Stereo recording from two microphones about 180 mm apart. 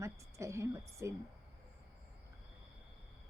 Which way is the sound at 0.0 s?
15° right (ahead or behind).